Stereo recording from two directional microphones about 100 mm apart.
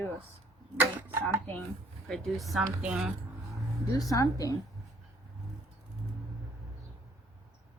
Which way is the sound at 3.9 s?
35° left (ahead or behind).